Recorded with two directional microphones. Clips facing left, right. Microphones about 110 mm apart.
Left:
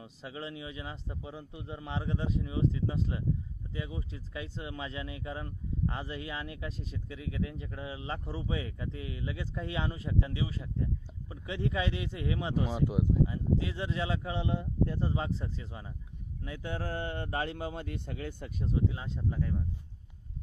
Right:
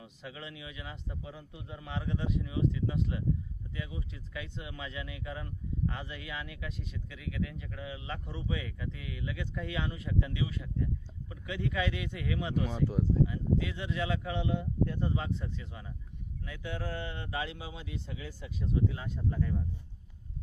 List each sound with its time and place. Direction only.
0.0 s speech: 30° left (ahead or behind)
12.8 s speech: 15° left (ahead or behind)
13.2 s speech: 30° left (ahead or behind); by 18.5 s 55° left (ahead or behind)
18.6 s speech: 25° left (ahead or behind)
19.3 s speech: 5° left (ahead or behind)